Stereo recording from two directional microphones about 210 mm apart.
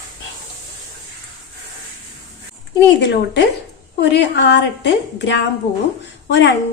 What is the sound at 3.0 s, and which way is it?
A woman's voice, 55° left (ahead or behind).